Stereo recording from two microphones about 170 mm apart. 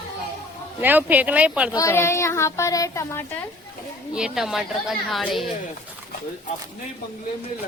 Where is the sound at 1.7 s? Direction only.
15° left (ahead or behind).